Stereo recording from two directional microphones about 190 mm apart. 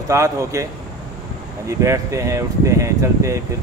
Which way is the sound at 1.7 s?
15° right (ahead or behind).